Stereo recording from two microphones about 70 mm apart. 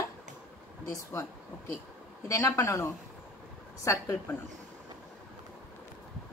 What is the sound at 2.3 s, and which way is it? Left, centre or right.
A woman's voice, left.